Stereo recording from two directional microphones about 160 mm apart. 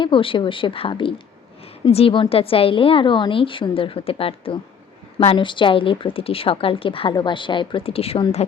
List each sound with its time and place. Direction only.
0.0 s a woman's voice: 30° left (ahead or behind)